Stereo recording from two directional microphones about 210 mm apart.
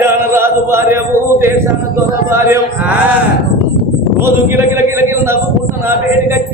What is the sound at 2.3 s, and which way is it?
Speech, 10° right (ahead or behind).